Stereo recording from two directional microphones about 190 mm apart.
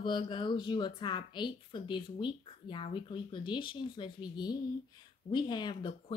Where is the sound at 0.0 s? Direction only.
25° left (ahead or behind).